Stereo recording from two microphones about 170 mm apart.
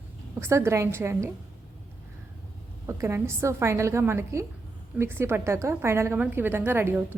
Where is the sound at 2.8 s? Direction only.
15° right (ahead or behind).